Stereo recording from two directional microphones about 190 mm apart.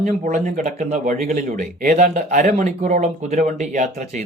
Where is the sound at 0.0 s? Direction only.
40° right (ahead or behind).